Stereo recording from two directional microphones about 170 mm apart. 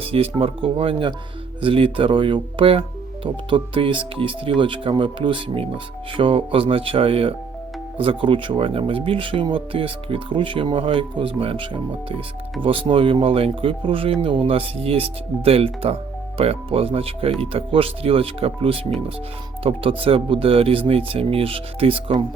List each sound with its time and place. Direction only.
0.1 s speech: 35° right (ahead or behind)